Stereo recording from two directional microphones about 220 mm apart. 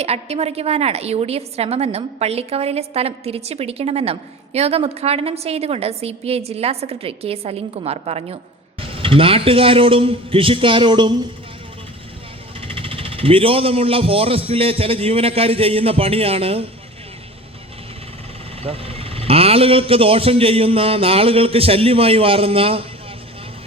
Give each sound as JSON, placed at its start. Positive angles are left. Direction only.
{"t": 0.0, "sound": "a woman's voice", "side_deg": -30}
{"t": 12.5, "sound": "a woman's voice", "side_deg": -25}
{"t": 18.6, "sound": "a woman's voice", "side_deg": -25}